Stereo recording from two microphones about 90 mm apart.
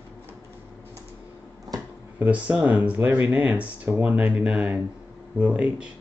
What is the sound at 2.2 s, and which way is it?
Speech, 15° right (ahead or behind).